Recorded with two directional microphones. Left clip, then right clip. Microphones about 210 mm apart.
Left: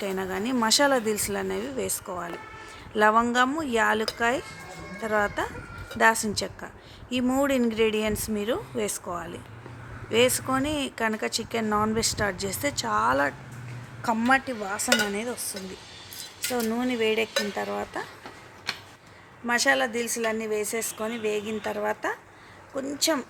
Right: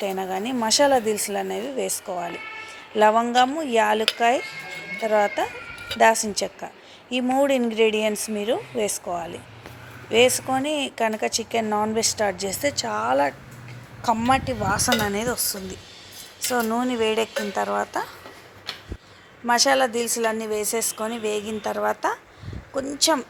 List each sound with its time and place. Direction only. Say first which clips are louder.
0.0 s a woman's voice: right 3 dB; 5° left (ahead or behind)
14.7 s a woman's voice: right 2 dB; 15° right (ahead or behind)
16.5 s a woman's voice: right 5 dB; 5° right (ahead or behind)
19.5 s a woman's voice: right 4 dB; 10° right (ahead or behind)